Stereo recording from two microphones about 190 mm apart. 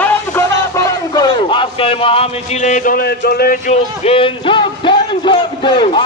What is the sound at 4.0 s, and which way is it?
Music, 30° left (ahead or behind).